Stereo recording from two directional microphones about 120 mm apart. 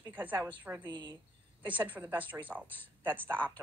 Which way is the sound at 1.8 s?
15° right (ahead or behind).